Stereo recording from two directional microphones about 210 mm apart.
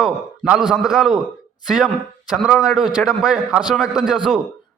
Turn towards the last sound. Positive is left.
turn(degrees=0)  # may be behind; listen again after turning